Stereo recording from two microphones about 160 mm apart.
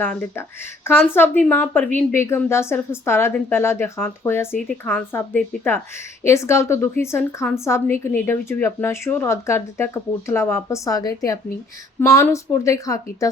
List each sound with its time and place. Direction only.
0.0 s a woman's voice: 10° left (ahead or behind)